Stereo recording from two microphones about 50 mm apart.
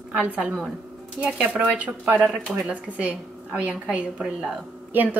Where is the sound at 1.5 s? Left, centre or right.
Right.